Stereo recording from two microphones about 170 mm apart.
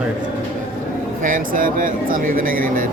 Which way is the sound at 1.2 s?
55° right (ahead or behind).